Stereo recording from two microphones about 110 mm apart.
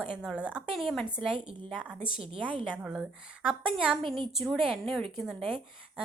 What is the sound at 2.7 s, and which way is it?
A woman's voice, 10° right (ahead or behind).